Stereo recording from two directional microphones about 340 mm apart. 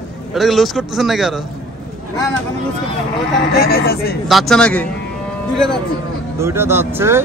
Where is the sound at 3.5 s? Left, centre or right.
Left.